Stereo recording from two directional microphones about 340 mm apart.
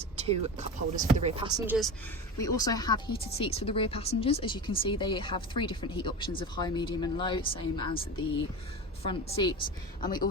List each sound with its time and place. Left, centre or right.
0.0 s speech: centre
2.4 s speech: centre
9.0 s speech: centre